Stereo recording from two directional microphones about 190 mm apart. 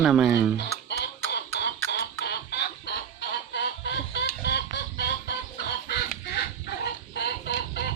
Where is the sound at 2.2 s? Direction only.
60° left (ahead or behind).